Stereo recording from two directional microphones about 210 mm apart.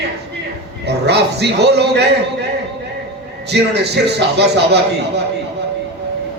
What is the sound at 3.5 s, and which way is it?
Speech, 50° right (ahead or behind).